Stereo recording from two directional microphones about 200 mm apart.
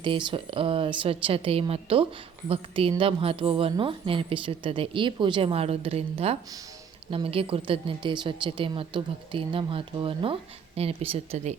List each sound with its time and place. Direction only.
0.0 s a woman's voice: 25° right (ahead or behind)